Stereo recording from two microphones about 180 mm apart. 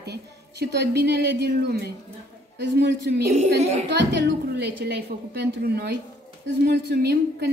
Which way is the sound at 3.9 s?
70° right (ahead or behind).